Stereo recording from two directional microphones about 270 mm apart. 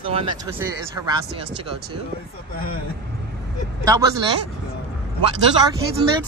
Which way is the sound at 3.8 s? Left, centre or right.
Centre.